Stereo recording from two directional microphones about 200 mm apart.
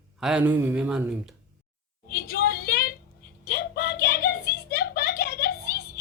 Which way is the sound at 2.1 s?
50° left (ahead or behind).